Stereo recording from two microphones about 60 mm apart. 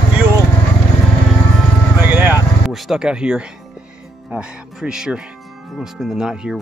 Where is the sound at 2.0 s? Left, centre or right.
Right.